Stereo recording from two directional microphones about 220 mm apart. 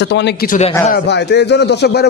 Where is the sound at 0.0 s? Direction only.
50° left (ahead or behind).